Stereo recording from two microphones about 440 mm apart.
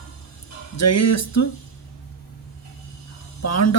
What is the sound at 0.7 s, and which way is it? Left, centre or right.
Speech, left.